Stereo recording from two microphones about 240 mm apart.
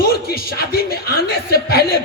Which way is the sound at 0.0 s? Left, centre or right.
Left.